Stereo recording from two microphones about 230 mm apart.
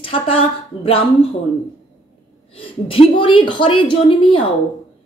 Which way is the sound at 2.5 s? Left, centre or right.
Left.